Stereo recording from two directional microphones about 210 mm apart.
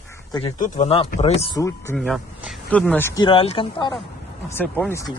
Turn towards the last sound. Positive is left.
turn(degrees=15)  # may be behind; listen again after turning